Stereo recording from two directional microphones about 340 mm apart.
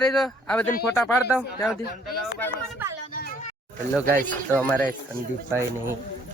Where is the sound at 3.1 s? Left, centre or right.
Left.